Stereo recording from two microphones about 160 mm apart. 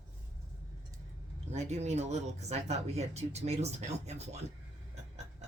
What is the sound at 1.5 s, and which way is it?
Speech, 45° right (ahead or behind).